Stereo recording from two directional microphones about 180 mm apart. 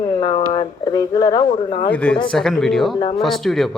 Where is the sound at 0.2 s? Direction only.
25° left (ahead or behind).